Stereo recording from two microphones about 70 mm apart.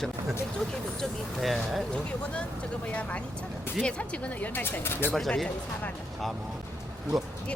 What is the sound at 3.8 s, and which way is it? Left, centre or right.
Speech, centre.